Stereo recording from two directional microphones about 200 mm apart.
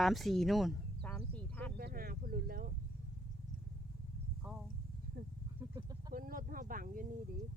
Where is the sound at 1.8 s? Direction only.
50° right (ahead or behind).